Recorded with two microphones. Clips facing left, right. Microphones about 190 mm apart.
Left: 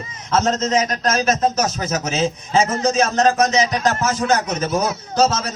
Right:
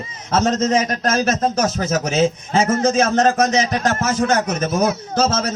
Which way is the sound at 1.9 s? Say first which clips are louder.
Right 3 dB; 55° right (ahead or behind).